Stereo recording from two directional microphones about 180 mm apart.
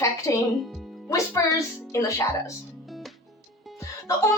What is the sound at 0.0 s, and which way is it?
Music, 15° left (ahead or behind).